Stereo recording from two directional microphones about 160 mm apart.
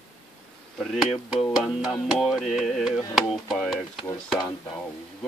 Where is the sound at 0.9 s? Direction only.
Centre (ahead or behind).